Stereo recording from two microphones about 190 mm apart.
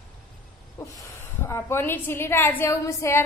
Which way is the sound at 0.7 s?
15° left (ahead or behind).